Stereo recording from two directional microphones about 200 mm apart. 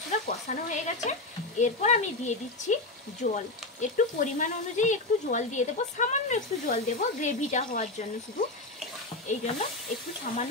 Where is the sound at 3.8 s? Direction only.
40° left (ahead or behind).